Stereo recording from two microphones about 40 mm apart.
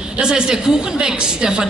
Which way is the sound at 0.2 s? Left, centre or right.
Centre.